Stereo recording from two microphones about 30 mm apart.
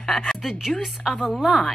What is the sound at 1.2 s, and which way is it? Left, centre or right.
Speech, right.